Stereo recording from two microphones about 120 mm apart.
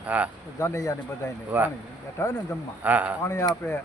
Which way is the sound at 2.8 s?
15° right (ahead or behind).